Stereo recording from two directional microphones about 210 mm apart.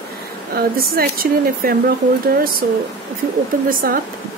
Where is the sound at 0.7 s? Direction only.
45° right (ahead or behind).